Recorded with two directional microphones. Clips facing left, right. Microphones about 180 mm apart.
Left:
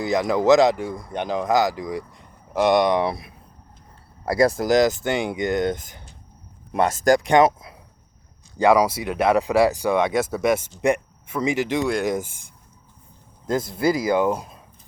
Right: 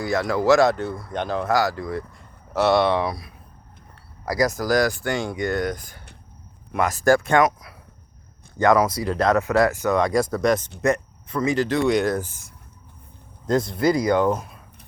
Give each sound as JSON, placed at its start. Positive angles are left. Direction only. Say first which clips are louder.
{"t": 0.0, "sound": "speech", "louder": "left 2 dB", "side_deg": 20}
{"t": 7.0, "sound": "speech", "louder": "left 1 dB", "side_deg": 15}
{"t": 8.5, "sound": "speech", "louder": "left 1 dB", "side_deg": 10}
{"t": 13.7, "sound": "speech", "louder": "even", "side_deg": 25}
{"t": 14.2, "sound": "speech", "louder": "even", "side_deg": 10}